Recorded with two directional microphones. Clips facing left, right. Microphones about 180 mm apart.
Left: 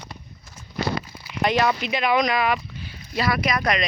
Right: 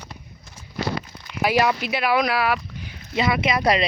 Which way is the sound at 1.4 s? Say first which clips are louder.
Right 1 dB; 5° right (ahead or behind).